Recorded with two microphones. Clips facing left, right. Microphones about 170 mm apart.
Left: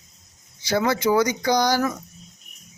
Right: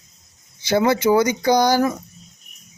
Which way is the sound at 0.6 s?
25° right (ahead or behind).